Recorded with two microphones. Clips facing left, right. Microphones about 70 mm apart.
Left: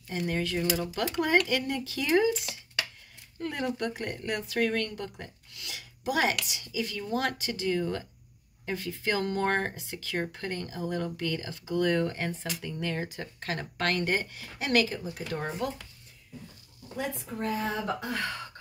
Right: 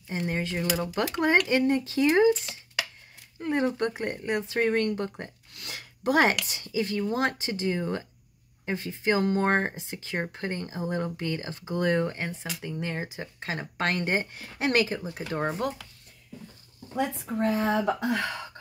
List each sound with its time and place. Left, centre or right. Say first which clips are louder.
0.1 s speech: even; right
16.9 s speech: right 5 dB; right